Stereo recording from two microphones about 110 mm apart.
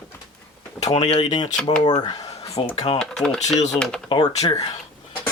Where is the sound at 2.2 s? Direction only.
70° left (ahead or behind).